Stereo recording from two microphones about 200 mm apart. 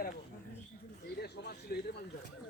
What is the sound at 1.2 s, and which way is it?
Speech, 50° left (ahead or behind).